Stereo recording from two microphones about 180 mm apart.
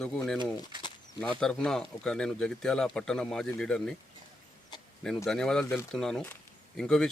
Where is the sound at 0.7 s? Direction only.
25° right (ahead or behind).